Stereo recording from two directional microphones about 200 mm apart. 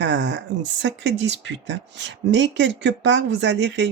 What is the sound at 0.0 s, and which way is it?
Speech, 65° right (ahead or behind).